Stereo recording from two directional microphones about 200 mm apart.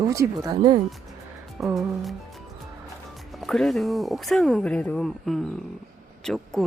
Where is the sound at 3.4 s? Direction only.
Centre (ahead or behind).